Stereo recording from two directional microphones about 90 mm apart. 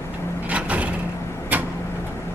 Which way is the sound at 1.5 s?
20° right (ahead or behind).